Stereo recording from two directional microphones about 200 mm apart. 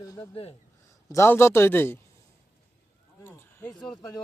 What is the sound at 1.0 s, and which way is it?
Speech, 15° left (ahead or behind).